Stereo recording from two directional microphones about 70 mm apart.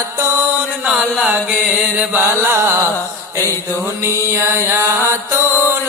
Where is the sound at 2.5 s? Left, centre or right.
Right.